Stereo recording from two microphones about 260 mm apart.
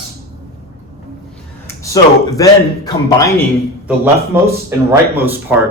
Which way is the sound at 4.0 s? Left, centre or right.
Centre.